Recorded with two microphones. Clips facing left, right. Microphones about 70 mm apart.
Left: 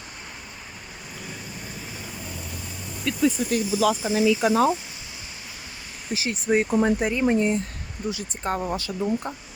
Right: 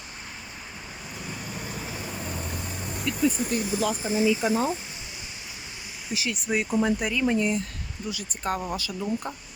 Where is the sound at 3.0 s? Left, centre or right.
Left.